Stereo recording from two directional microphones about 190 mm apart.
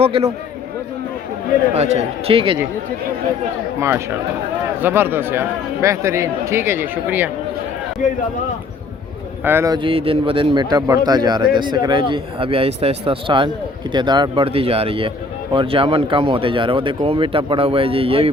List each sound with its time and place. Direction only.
0.0 s speech: 30° right (ahead or behind)
1.7 s speech: 35° right (ahead or behind)
3.8 s speech: 15° right (ahead or behind)
8.0 s speech: 40° left (ahead or behind)
9.4 s a man's voice: 10° right (ahead or behind); by 18.3 s 30° right (ahead or behind)